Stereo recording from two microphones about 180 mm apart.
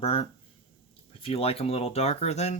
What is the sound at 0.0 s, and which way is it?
Speech, 35° left (ahead or behind).